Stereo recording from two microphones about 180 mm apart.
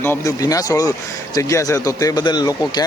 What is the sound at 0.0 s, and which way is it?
Speech, 15° left (ahead or behind).